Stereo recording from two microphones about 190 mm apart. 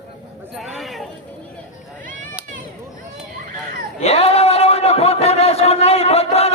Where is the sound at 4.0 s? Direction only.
35° left (ahead or behind).